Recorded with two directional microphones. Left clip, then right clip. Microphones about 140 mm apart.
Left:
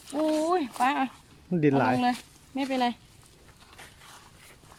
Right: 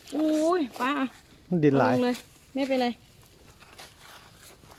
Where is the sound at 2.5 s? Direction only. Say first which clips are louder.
Right 1 dB; 45° left (ahead or behind).